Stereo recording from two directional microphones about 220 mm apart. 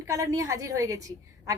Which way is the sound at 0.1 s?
15° right (ahead or behind).